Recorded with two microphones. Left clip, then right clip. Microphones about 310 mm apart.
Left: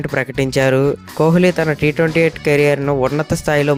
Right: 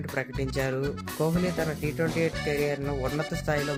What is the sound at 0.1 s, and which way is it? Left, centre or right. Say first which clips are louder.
Speech: left 12 dB; left.